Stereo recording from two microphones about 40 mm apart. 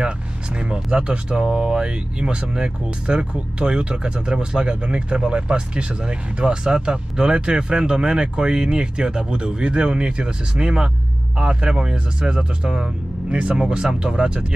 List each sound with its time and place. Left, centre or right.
0.6 s speech: right
13.3 s speech: right
13.6 s speech: centre